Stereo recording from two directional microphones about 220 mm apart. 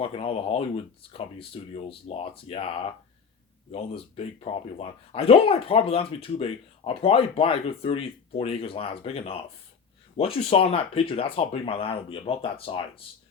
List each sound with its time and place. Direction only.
0.0 s speech: 25° left (ahead or behind)